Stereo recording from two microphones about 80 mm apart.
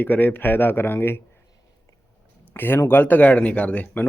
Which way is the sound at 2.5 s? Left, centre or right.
Left.